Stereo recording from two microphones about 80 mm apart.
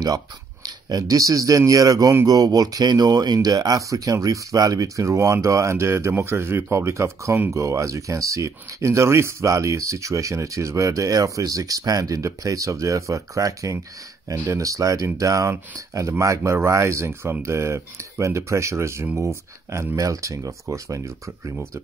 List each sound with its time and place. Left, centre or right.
0.8 s speech: right